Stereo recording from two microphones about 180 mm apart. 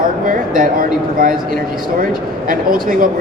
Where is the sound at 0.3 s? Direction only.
50° right (ahead or behind).